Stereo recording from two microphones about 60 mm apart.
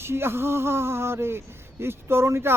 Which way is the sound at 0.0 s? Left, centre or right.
Right.